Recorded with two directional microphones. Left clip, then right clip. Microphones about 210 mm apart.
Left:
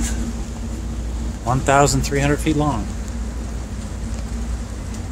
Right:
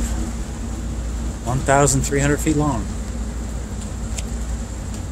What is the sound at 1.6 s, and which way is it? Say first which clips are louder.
Speech: left 1 dB; 10° left (ahead or behind).